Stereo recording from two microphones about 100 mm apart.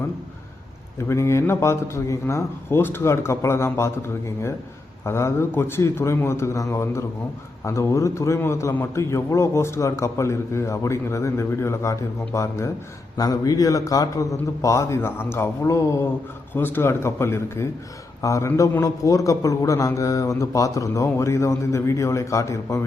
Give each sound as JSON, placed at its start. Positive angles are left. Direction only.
{"t": 1.0, "sound": "a man's voice", "side_deg": 30}
{"t": 5.0, "sound": "a man's voice", "side_deg": 25}
{"t": 13.1, "sound": "speech", "side_deg": 40}
{"t": 16.6, "sound": "a man's voice", "side_deg": 20}